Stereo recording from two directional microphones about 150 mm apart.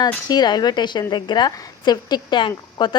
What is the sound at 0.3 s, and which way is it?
A woman's voice, 25° left (ahead or behind).